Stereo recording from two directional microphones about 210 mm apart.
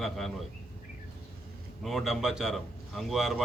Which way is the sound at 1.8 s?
Centre (ahead or behind).